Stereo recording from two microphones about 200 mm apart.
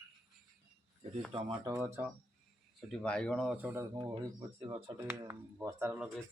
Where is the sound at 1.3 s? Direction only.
15° right (ahead or behind).